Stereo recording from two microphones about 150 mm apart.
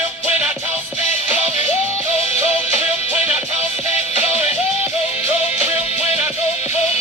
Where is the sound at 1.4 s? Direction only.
50° left (ahead or behind).